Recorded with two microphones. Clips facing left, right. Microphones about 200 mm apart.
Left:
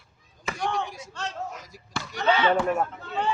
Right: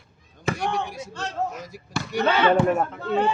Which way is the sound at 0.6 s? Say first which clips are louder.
Left 3 dB; 65° right (ahead or behind).